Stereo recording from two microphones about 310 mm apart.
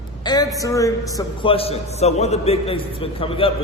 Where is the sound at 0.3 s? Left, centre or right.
Centre.